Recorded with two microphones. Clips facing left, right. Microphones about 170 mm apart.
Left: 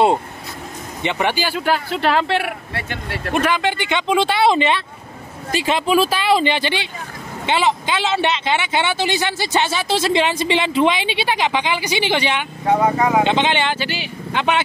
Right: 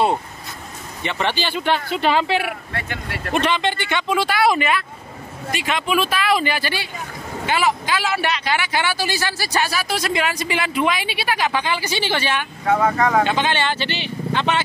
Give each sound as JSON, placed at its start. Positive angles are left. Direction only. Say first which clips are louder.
{"t": 1.0, "sound": "speech", "louder": "left 3 dB", "side_deg": 15}
{"t": 3.3, "sound": "speech", "louder": "left 1 dB", "side_deg": 10}